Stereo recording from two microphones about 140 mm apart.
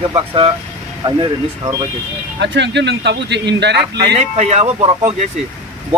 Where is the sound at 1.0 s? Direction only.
30° right (ahead or behind).